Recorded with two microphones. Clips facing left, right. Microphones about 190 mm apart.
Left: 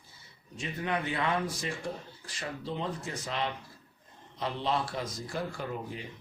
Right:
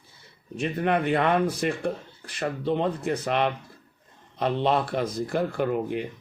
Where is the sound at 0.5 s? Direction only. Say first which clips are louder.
Right 9 dB; 60° right (ahead or behind).